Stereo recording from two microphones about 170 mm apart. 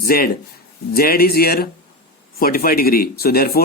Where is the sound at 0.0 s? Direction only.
60° left (ahead or behind).